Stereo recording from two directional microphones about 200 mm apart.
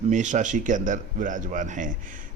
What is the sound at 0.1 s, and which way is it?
Speech, 40° right (ahead or behind).